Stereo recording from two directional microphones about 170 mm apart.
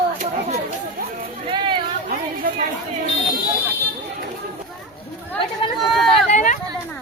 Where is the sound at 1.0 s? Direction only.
60° right (ahead or behind).